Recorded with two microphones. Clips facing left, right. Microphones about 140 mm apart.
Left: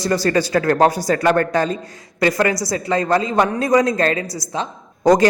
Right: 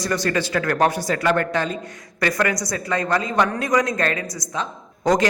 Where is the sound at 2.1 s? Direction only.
25° left (ahead or behind).